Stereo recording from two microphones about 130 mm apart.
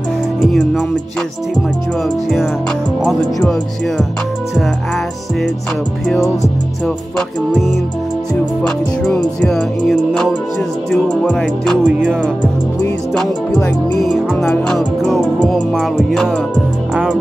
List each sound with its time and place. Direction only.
0.4 s music: 5° left (ahead or behind)
3.1 s music: centre (ahead or behind)
8.6 s music: 5° left (ahead or behind)
11.8 s music: 10° right (ahead or behind)
13.1 s music: 5° left (ahead or behind)